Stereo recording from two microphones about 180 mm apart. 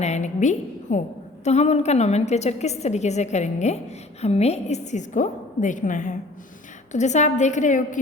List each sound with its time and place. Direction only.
0.0 s a woman's voice: 40° left (ahead or behind)